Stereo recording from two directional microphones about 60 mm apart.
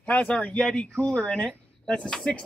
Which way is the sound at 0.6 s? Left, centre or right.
Centre.